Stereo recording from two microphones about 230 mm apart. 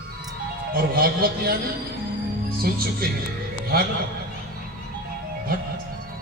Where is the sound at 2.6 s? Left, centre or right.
Right.